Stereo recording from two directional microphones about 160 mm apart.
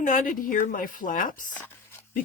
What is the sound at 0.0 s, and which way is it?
Speech, 55° left (ahead or behind).